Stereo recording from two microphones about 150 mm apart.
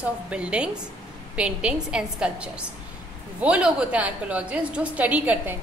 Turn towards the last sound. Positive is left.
turn(degrees=-10)  # may be behind; listen again after turning